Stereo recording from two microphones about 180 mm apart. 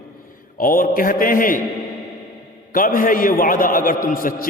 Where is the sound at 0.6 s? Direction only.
50° left (ahead or behind).